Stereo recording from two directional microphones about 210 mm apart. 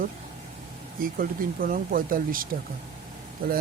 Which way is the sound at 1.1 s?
45° right (ahead or behind).